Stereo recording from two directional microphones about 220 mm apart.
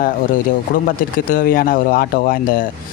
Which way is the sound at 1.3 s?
40° left (ahead or behind).